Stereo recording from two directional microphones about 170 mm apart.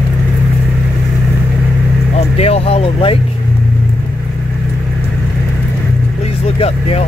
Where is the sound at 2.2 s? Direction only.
35° left (ahead or behind).